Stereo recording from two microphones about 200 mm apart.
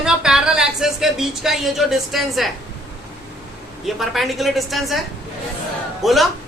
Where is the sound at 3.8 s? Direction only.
Centre (ahead or behind).